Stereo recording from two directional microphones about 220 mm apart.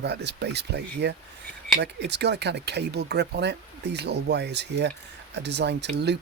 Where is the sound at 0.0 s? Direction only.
50° right (ahead or behind).